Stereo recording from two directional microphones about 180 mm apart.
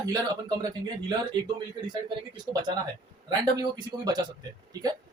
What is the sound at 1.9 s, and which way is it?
Speech, 25° right (ahead or behind).